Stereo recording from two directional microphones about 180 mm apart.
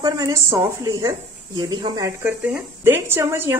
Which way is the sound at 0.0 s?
20° right (ahead or behind).